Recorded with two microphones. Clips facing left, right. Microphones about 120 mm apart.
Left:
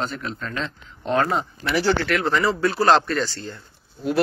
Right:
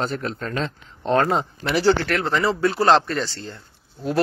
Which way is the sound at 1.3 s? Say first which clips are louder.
Right 2 dB; 25° right (ahead or behind).